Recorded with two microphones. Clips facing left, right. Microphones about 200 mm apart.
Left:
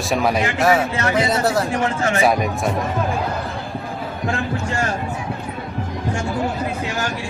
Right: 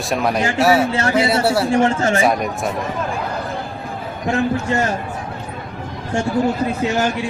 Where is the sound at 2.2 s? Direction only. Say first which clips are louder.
Left 3 dB; centre (ahead or behind).